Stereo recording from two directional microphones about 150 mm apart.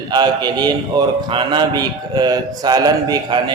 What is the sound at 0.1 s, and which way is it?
A man's voice, 25° right (ahead or behind).